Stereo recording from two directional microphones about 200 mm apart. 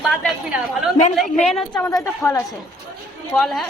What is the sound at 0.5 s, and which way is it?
Speech, 5° right (ahead or behind).